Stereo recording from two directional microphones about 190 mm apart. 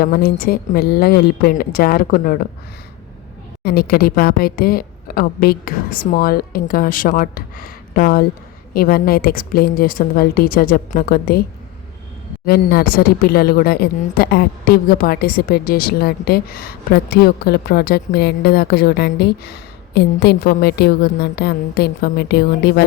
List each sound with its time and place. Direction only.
0.0 s a woman's voice: 50° left (ahead or behind)
3.6 s a woman's voice: 55° left (ahead or behind)
12.5 s a woman's voice: 55° left (ahead or behind)